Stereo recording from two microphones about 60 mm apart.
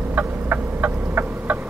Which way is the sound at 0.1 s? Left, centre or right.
Right.